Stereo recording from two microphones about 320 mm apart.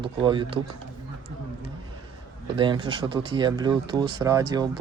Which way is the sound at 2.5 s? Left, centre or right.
Centre.